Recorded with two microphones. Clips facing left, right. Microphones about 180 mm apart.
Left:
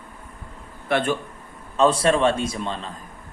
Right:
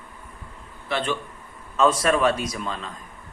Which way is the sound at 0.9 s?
55° left (ahead or behind).